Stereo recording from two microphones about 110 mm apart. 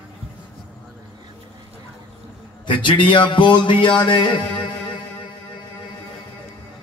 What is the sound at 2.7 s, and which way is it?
Speech, 45° left (ahead or behind).